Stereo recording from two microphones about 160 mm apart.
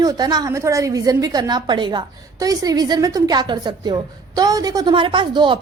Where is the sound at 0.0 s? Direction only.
25° right (ahead or behind).